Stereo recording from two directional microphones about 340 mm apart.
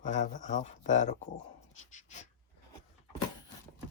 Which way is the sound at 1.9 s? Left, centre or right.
Left.